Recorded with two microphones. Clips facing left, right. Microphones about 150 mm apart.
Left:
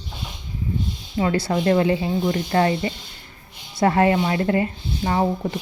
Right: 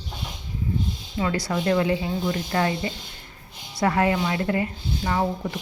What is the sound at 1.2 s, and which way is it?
A woman's voice, 30° left (ahead or behind).